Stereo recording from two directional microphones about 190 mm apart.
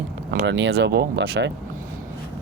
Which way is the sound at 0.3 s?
70° right (ahead or behind).